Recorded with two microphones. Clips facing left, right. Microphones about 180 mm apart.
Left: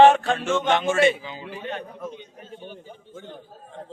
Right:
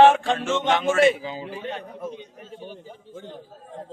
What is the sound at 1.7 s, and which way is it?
A man's voice, 10° right (ahead or behind).